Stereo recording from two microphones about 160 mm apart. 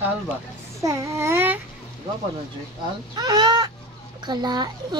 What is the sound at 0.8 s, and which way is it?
Speech, 20° right (ahead or behind).